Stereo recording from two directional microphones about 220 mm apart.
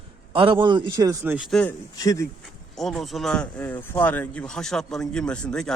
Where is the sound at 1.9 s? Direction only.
15° left (ahead or behind).